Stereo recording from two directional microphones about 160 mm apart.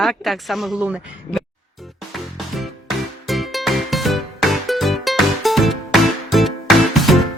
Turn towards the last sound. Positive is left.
turn(degrees=0)  # may be behind; listen again after turning